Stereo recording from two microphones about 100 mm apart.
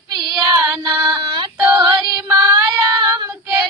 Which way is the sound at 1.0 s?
50° right (ahead or behind).